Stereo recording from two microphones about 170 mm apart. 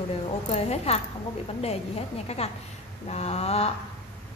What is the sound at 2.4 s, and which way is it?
A woman's voice, 35° left (ahead or behind).